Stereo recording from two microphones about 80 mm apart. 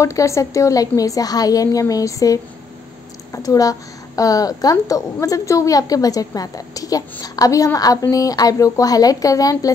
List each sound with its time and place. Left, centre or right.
0.0 s a woman's voice: left
3.4 s a woman's voice: left